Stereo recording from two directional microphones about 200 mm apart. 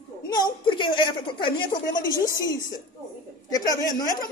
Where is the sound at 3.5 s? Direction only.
20° left (ahead or behind).